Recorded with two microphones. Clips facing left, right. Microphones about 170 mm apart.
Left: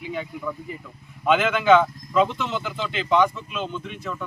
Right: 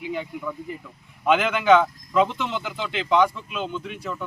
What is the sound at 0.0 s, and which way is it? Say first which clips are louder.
Speech: even; 10° right (ahead or behind).